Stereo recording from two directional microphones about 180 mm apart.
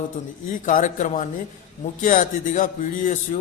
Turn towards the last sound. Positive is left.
turn(degrees=45)  # may be behind; listen again after turning